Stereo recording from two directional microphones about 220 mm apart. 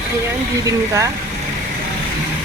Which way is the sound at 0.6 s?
15° right (ahead or behind).